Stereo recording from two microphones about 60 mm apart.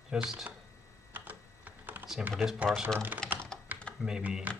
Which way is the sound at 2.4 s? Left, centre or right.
Centre.